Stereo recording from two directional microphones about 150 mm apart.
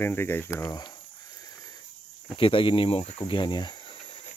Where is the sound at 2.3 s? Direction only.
35° left (ahead or behind).